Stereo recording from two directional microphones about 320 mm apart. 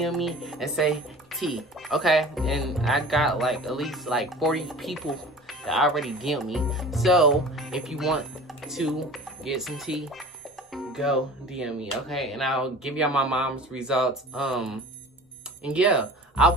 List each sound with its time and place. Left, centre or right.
0.0 s speech: centre